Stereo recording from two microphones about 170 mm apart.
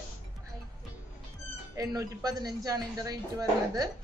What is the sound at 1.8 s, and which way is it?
Speech, 20° right (ahead or behind).